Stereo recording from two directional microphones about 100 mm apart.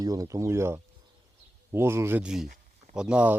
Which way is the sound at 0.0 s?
35° right (ahead or behind).